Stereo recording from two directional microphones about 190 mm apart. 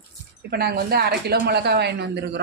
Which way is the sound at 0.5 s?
55° right (ahead or behind).